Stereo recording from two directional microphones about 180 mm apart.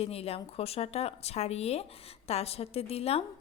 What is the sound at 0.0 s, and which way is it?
Speech, 35° left (ahead or behind).